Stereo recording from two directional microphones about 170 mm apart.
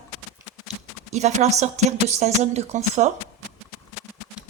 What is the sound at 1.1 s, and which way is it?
A woman's voice, 45° right (ahead or behind).